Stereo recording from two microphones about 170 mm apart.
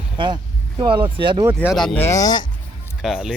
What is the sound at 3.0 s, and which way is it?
Speech, 5° right (ahead or behind).